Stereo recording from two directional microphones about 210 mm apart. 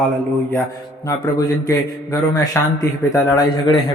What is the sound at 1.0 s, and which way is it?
A man's voice, 15° left (ahead or behind).